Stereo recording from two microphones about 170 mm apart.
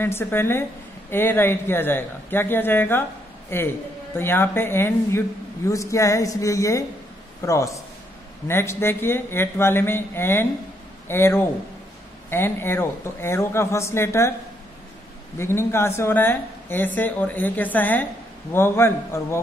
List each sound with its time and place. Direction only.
0.0 s speech: 15° left (ahead or behind)
15.3 s speech: 15° left (ahead or behind)